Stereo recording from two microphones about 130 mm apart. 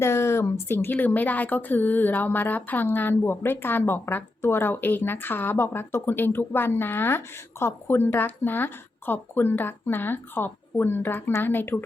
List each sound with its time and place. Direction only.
0.0 s a woman's voice: 20° left (ahead or behind)